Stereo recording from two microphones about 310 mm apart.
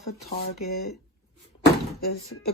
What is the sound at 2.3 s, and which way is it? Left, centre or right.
Speech, left.